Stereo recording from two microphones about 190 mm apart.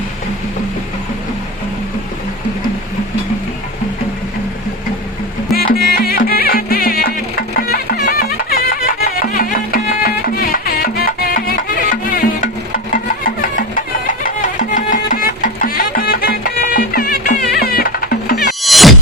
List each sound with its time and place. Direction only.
5.5 s music: 55° left (ahead or behind)
18.6 s music: centre (ahead or behind)